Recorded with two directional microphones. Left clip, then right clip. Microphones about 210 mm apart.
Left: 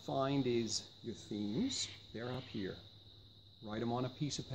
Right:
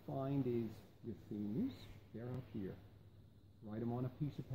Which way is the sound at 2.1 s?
15° left (ahead or behind).